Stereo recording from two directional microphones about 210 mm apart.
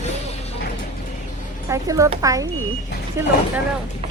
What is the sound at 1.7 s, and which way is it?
Speech, 15° right (ahead or behind).